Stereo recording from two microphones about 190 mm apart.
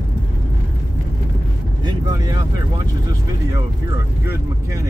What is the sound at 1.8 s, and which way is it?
Vehicle, 20° right (ahead or behind).